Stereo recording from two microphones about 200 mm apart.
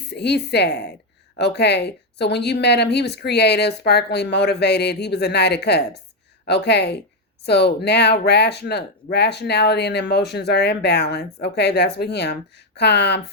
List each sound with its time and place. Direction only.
0.1 s speech: 55° left (ahead or behind)